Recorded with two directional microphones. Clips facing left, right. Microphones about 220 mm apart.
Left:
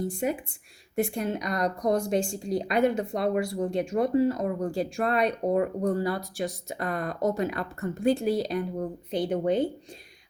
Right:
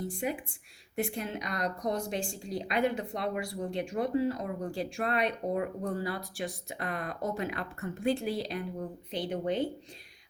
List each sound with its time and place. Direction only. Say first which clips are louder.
0.2 s a woman's voice: left 5 dB; 45° left (ahead or behind)